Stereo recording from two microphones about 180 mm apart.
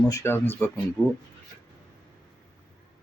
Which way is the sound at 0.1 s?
15° left (ahead or behind).